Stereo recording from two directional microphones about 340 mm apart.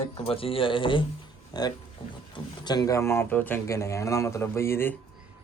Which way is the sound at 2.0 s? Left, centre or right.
Centre.